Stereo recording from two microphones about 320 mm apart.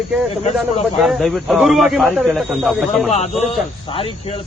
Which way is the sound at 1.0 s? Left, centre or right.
Centre.